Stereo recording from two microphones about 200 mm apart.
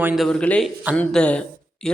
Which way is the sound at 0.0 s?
Centre (ahead or behind).